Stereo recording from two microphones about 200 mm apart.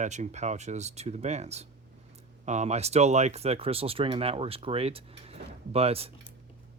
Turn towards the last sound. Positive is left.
turn(degrees=-30)  # may be behind; listen again after turning